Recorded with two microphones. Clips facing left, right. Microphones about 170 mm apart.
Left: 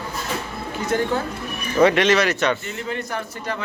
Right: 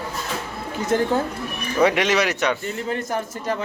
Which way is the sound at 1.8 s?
10° right (ahead or behind).